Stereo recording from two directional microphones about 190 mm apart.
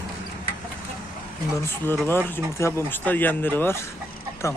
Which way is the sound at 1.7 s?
10° left (ahead or behind).